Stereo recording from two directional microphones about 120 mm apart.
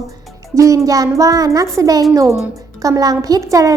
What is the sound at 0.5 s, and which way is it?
A woman's voice, 25° right (ahead or behind).